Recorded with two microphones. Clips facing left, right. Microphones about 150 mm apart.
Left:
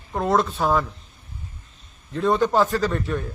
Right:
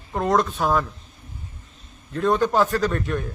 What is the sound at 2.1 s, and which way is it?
Speech, 10° left (ahead or behind).